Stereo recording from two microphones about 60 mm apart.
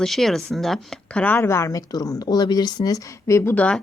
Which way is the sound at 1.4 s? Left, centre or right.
Left.